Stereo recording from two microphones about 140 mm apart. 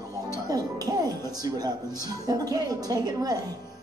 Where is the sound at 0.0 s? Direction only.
25° right (ahead or behind).